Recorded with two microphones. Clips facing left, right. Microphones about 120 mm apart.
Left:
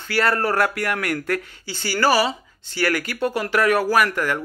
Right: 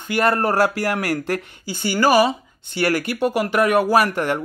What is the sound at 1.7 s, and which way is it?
Speech, 15° right (ahead or behind).